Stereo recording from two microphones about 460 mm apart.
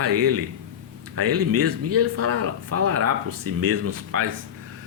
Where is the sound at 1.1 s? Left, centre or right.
Right.